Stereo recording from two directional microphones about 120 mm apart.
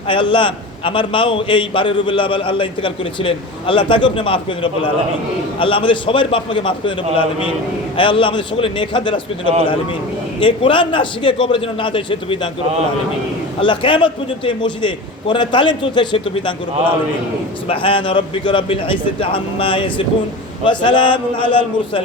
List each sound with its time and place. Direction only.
0.1 s a man's voice: 45° left (ahead or behind)
10.4 s a man's voice: 45° left (ahead or behind)
13.6 s a man's voice: 45° left (ahead or behind)
17.7 s a man's voice: 50° left (ahead or behind)